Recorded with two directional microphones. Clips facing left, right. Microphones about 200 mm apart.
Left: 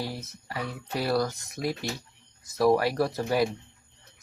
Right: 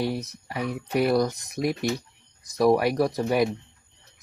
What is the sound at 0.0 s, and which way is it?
Speech, 20° right (ahead or behind).